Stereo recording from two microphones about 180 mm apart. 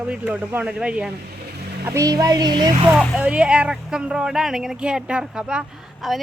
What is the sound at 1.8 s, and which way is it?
Speech, 15° right (ahead or behind).